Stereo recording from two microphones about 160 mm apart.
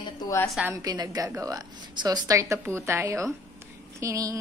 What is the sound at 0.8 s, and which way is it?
A woman's voice, 25° right (ahead or behind).